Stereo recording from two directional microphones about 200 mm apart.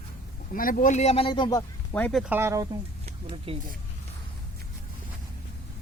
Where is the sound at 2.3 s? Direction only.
15° right (ahead or behind).